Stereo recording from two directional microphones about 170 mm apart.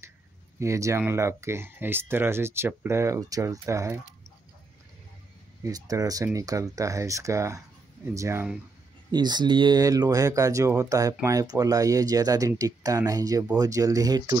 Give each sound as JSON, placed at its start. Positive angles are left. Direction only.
{"t": 0.6, "sound": "speech", "side_deg": -15}
{"t": 5.6, "sound": "speech", "side_deg": -20}
{"t": 9.1, "sound": "speech", "side_deg": -25}